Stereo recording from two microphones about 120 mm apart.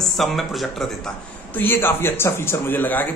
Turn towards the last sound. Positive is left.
turn(degrees=15)  # may be behind; listen again after turning